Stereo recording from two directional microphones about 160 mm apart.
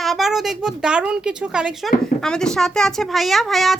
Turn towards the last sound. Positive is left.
turn(degrees=0)  # may be behind; listen again after turning